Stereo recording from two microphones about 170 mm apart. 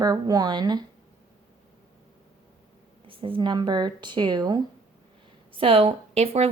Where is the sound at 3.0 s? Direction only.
30° right (ahead or behind).